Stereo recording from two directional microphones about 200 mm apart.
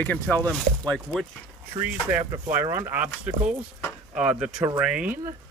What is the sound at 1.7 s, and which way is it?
Speech, 20° right (ahead or behind).